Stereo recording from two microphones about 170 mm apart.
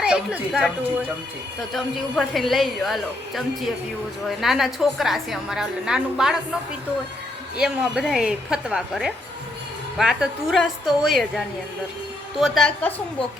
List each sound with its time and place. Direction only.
0.0 s speech: 5° right (ahead or behind)
1.7 s a woman's voice: centre (ahead or behind)